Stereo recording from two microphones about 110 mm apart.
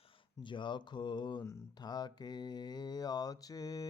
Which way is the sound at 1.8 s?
40° left (ahead or behind).